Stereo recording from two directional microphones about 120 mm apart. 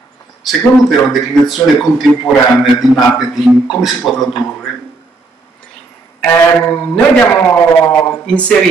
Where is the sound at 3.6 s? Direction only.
Centre (ahead or behind).